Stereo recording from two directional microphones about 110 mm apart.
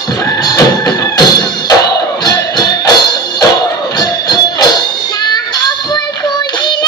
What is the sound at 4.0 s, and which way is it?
Music, 40° left (ahead or behind).